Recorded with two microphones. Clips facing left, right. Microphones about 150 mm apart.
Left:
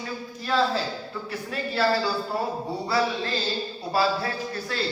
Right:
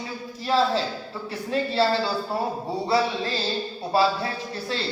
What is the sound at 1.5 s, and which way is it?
Speech, 25° right (ahead or behind).